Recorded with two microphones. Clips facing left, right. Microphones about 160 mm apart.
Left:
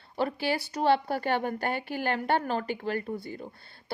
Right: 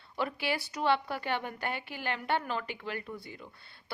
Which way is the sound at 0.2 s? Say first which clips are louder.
Left 4 dB; 35° left (ahead or behind).